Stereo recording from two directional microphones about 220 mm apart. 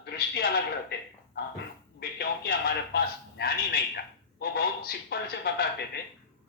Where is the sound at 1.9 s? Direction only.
45° left (ahead or behind).